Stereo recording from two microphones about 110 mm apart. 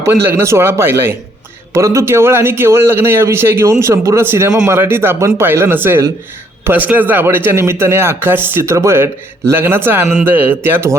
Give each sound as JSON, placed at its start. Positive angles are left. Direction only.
{"t": 0.0, "sound": "a man's voice", "side_deg": -25}